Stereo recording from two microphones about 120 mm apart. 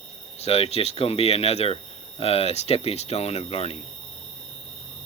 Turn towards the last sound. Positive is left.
turn(degrees=60)  # may be behind; listen again after turning